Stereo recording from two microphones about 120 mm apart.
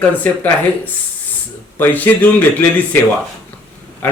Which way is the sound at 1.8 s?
15° left (ahead or behind).